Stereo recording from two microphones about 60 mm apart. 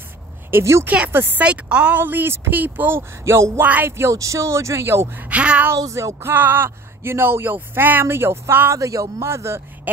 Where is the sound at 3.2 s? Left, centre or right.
Right.